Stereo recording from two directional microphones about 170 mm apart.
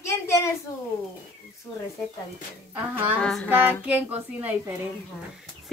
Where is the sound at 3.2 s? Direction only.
5° left (ahead or behind).